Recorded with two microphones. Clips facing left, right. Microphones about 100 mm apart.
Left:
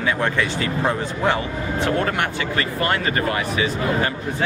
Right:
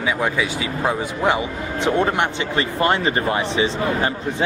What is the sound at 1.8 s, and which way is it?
Speech, 20° right (ahead or behind).